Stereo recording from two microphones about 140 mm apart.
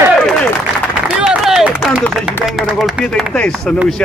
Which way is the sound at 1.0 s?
Centre (ahead or behind).